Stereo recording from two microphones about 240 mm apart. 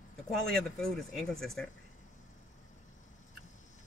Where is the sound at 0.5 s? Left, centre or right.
Centre.